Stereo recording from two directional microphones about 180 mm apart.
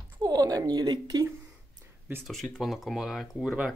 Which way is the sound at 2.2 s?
Centre (ahead or behind).